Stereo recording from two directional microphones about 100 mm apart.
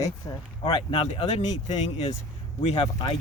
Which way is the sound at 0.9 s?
80° left.